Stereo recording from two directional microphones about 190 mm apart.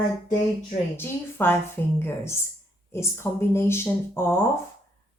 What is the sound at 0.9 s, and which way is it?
A woman's voice, 10° left (ahead or behind).